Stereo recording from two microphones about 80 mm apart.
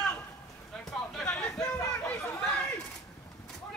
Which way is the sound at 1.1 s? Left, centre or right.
Centre.